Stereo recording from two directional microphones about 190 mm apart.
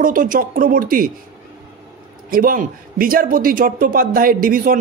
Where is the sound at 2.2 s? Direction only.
50° right (ahead or behind).